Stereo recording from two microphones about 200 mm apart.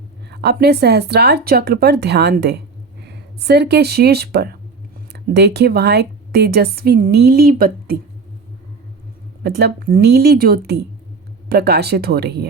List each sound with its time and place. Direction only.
0.3 s speech: 55° right (ahead or behind)
9.4 s speech: 55° right (ahead or behind)